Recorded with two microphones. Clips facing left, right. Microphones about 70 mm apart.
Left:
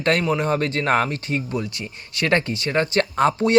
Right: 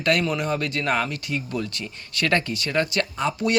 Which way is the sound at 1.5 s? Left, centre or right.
Left.